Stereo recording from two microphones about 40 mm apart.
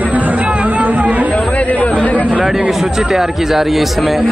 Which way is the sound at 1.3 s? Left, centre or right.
Left.